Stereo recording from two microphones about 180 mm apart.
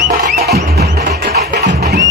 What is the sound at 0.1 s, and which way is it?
Music, 60° right (ahead or behind).